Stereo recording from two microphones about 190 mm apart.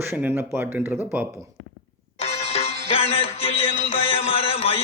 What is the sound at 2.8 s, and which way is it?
Music, 30° left (ahead or behind).